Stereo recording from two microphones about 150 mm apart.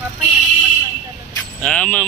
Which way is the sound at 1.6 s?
10° left (ahead or behind).